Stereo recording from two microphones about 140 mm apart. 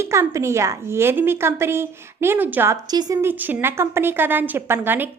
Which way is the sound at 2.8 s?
30° right (ahead or behind).